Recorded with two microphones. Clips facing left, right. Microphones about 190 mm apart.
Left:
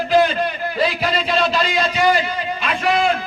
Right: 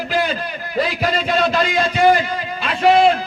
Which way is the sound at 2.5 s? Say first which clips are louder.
Right 6 dB; 30° right (ahead or behind).